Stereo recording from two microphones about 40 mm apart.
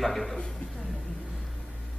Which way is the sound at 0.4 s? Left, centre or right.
Left.